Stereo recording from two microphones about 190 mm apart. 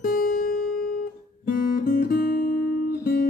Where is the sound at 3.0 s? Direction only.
50° left (ahead or behind).